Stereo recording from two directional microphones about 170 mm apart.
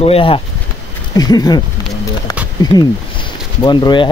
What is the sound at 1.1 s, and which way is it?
Speech, 20° left (ahead or behind).